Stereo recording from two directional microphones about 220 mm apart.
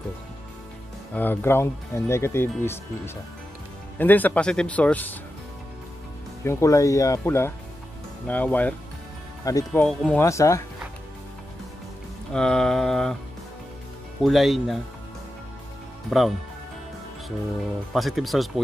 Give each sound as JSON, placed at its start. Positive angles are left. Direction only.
{"t": 1.1, "sound": "speech", "side_deg": 10}
{"t": 4.0, "sound": "speech", "side_deg": 10}
{"t": 6.4, "sound": "speech", "side_deg": 15}
{"t": 9.7, "sound": "speech", "side_deg": 5}
{"t": 12.3, "sound": "mantra", "side_deg": 5}
{"t": 14.2, "sound": "mantra", "side_deg": 0}
{"t": 16.1, "sound": "mantra", "side_deg": 0}
{"t": 17.9, "sound": "mantra", "side_deg": 0}